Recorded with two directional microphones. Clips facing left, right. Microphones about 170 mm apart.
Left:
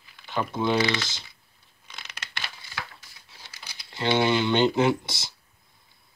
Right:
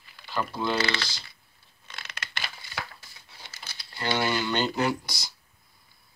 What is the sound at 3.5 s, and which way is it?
Speech, 15° left (ahead or behind).